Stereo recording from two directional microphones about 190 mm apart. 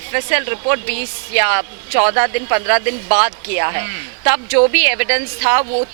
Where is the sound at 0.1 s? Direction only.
15° right (ahead or behind).